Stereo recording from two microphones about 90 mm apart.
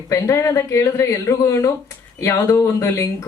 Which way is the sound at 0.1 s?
35° left (ahead or behind).